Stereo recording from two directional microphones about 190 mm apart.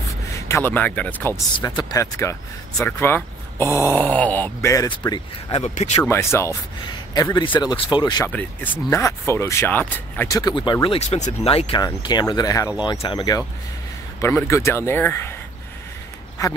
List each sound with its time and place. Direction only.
0.3 s speech: 15° left (ahead or behind)
5.1 s speech: 30° left (ahead or behind)
6.0 s a man's voice: 15° left (ahead or behind)
8.3 s speech: 10° left (ahead or behind)